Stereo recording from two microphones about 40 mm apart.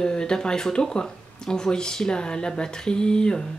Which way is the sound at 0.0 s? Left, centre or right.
Left.